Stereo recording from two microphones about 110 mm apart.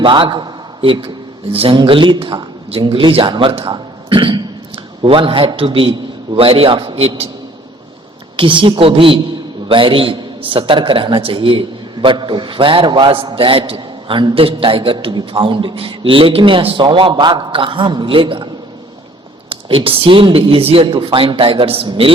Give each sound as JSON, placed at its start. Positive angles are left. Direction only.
{"t": 0.0, "sound": "a man's voice", "side_deg": -45}
{"t": 8.4, "sound": "a man's voice", "side_deg": -50}
{"t": 19.5, "sound": "a man's voice", "side_deg": -55}